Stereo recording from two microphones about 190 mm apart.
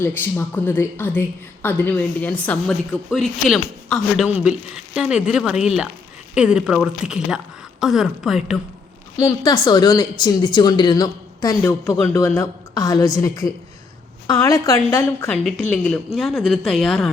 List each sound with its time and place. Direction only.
0.0 s a woman's voice: 10° left (ahead or behind)
9.2 s a woman's voice: 20° left (ahead or behind); by 17.1 s centre (ahead or behind)